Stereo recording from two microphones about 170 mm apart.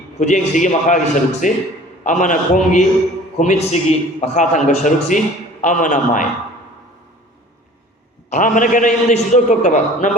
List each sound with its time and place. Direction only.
0.2 s a man's voice: 45° left (ahead or behind)
8.3 s a man's voice: 50° left (ahead or behind)